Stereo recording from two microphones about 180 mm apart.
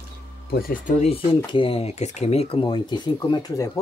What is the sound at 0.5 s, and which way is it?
Speech, 55° left (ahead or behind).